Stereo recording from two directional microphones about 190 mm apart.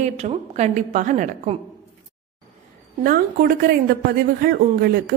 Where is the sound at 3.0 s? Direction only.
50° right (ahead or behind).